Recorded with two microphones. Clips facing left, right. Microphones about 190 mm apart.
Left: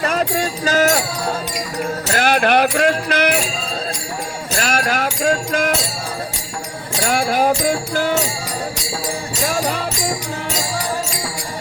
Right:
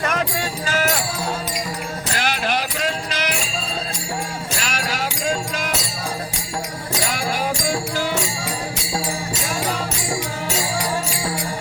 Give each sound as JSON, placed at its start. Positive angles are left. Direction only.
{"t": 0.0, "sound": "music", "side_deg": 30}
{"t": 2.1, "sound": "music", "side_deg": 50}
{"t": 4.6, "sound": "music", "side_deg": 50}
{"t": 7.1, "sound": "music", "side_deg": 50}